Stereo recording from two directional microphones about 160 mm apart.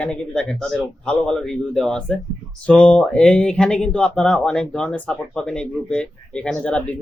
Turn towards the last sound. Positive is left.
turn(degrees=5)  # may be behind; listen again after turning